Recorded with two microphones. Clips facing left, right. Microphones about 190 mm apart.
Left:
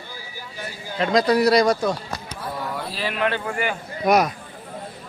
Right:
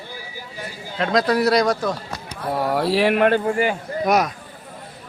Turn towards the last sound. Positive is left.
turn(degrees=0)  # may be behind; listen again after turning